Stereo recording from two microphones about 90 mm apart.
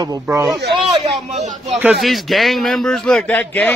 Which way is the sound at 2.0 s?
Centre (ahead or behind).